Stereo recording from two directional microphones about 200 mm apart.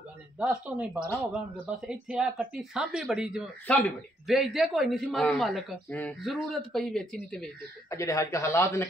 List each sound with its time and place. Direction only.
0.4 s speech: 5° right (ahead or behind)
7.9 s speech: 15° left (ahead or behind)